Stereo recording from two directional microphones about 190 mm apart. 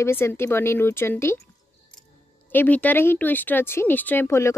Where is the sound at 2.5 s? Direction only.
10° left (ahead or behind).